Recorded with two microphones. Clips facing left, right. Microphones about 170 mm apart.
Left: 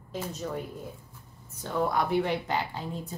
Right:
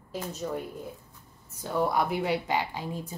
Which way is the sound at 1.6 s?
10° right (ahead or behind).